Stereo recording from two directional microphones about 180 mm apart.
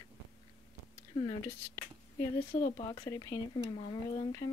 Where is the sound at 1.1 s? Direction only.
35° left (ahead or behind).